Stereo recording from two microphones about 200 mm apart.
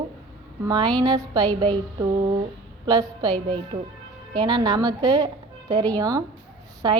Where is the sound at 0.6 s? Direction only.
20° right (ahead or behind).